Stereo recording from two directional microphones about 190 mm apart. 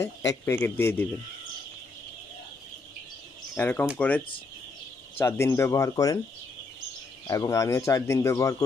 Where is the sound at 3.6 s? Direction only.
10° left (ahead or behind).